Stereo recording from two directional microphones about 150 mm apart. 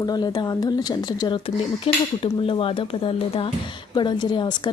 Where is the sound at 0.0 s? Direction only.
25° left (ahead or behind).